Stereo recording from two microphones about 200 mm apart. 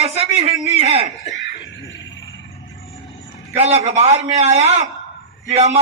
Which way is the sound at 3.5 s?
30° right (ahead or behind).